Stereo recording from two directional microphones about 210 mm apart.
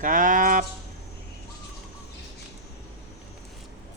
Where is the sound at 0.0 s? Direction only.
40° right (ahead or behind).